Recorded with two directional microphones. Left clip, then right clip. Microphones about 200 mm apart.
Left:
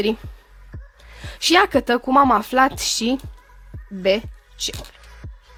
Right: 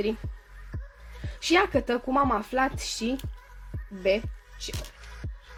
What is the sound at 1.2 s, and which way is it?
Speech, 50° left (ahead or behind).